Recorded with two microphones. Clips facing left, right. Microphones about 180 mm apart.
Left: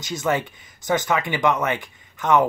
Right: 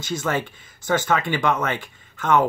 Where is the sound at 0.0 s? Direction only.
20° left (ahead or behind).